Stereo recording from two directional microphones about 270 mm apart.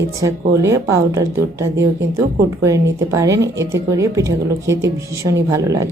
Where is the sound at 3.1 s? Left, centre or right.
Centre.